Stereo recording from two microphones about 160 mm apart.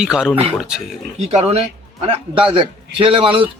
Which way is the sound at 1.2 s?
45° right (ahead or behind).